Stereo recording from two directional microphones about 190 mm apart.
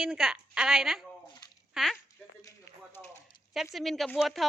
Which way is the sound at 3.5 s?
Centre (ahead or behind).